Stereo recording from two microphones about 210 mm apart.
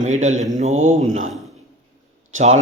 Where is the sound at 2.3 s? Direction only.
30° right (ahead or behind).